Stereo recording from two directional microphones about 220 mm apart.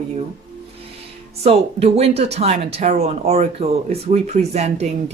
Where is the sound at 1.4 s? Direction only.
25° right (ahead or behind).